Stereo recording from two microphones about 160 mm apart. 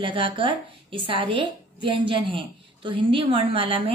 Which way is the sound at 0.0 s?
35° right (ahead or behind).